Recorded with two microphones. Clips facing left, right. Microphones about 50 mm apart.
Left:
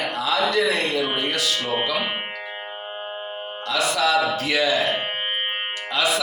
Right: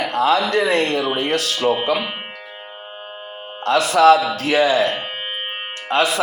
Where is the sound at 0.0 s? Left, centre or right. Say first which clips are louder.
Right 6 dB; right.